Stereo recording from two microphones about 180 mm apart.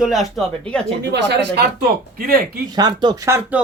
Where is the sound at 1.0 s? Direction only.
70° right (ahead or behind).